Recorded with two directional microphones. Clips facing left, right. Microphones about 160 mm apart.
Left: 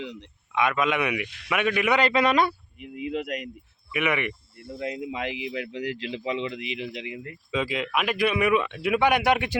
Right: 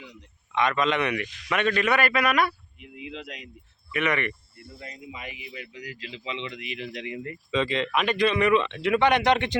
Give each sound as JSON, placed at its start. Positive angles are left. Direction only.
{"t": 0.0, "sound": "a man's voice", "side_deg": 70}
{"t": 0.5, "sound": "a man's voice", "side_deg": 5}
{"t": 2.7, "sound": "speech", "side_deg": 50}
{"t": 3.9, "sound": "speech", "side_deg": 10}
{"t": 4.8, "sound": "speech", "side_deg": 80}
{"t": 6.4, "sound": "speech", "side_deg": 25}